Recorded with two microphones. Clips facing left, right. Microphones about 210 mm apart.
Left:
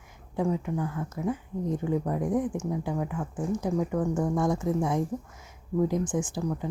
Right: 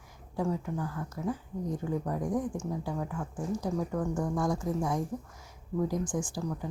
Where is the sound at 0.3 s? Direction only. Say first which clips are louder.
Left 4 dB; 20° left (ahead or behind).